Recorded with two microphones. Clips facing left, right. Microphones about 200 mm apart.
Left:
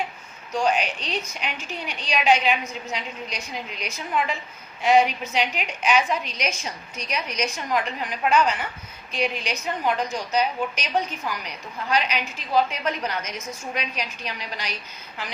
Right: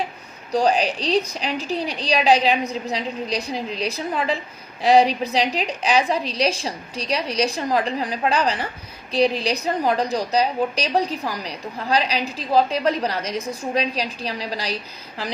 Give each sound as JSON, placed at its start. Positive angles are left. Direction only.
{"t": 0.5, "sound": "a woman's voice", "side_deg": -35}